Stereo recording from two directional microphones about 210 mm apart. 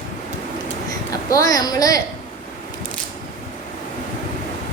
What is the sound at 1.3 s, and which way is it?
Speech, 15° left (ahead or behind).